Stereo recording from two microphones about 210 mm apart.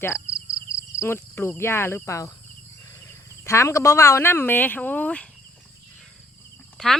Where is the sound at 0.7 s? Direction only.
10° left (ahead or behind).